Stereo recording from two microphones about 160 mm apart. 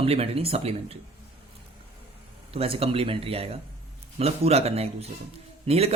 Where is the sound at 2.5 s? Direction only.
35° right (ahead or behind).